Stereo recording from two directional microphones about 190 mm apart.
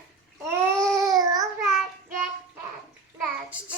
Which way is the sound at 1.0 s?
20° right (ahead or behind).